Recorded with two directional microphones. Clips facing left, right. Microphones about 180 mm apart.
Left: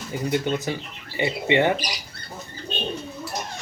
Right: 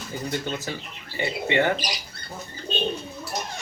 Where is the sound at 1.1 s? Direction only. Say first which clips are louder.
Left 3 dB; 20° left (ahead or behind).